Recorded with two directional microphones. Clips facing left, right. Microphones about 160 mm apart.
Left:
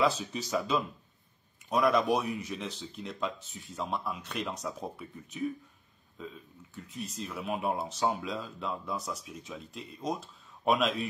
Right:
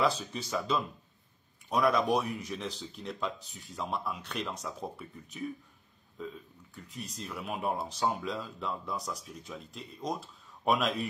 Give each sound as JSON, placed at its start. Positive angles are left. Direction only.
{"t": 0.0, "sound": "speech", "side_deg": 5}
{"t": 2.4, "sound": "speech", "side_deg": -30}
{"t": 2.8, "sound": "speech", "side_deg": 0}
{"t": 6.7, "sound": "speech", "side_deg": 0}